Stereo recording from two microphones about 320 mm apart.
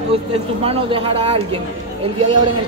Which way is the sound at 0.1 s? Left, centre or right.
Centre.